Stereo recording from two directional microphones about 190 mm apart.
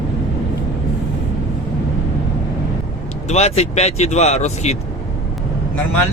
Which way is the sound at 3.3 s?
35° left (ahead or behind).